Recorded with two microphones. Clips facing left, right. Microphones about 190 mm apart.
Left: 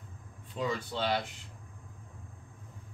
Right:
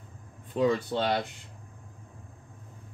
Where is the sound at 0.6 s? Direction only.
60° right (ahead or behind).